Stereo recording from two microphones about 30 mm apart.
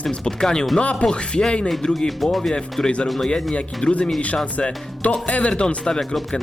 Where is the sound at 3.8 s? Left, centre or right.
Left.